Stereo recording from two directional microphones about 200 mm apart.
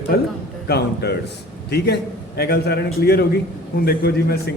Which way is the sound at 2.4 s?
50° left (ahead or behind).